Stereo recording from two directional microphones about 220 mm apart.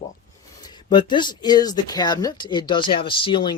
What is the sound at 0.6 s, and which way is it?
Speech, 20° left (ahead or behind).